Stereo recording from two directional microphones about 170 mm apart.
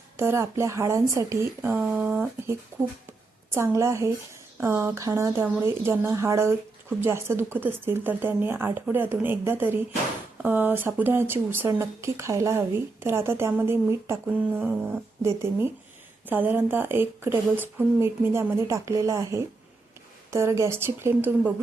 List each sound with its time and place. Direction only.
0.2 s speech: 15° right (ahead or behind)